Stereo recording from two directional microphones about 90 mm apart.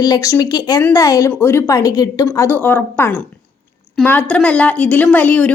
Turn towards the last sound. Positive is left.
turn(degrees=15)  # may be behind; listen again after turning